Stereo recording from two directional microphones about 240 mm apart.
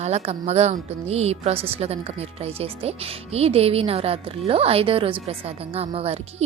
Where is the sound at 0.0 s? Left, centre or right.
Right.